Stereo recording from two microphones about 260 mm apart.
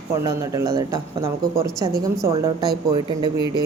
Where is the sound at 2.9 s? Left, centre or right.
Centre.